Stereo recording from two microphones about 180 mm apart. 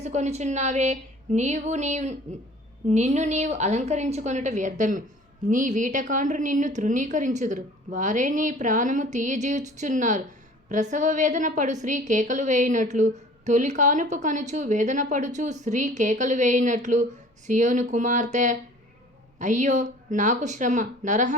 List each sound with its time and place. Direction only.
0.0 s a woman's voice: 40° right (ahead or behind)